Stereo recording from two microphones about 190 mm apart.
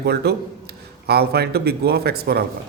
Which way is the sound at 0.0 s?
55° right (ahead or behind).